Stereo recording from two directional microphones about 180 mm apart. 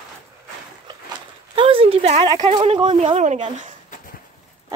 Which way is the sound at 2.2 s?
25° right (ahead or behind).